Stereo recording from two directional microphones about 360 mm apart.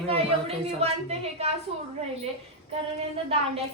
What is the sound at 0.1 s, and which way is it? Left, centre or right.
A woman's voice, centre.